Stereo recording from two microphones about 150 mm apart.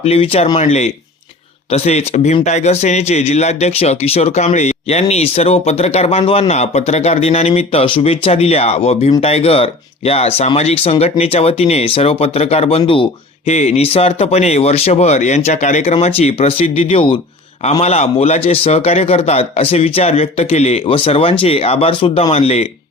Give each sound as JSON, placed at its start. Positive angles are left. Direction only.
{"t": 0.0, "sound": "a man's voice", "side_deg": 45}